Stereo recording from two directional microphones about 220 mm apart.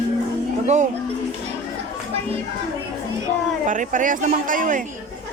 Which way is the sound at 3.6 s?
35° right (ahead or behind).